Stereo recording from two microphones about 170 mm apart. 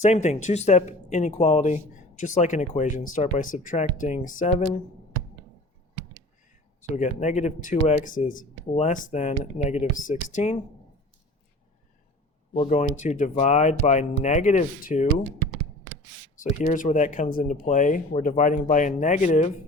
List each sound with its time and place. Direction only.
0.0 s speech: 45° left (ahead or behind)
6.8 s speech: 45° left (ahead or behind)
12.5 s speech: 45° left (ahead or behind)
16.4 s speech: 45° left (ahead or behind)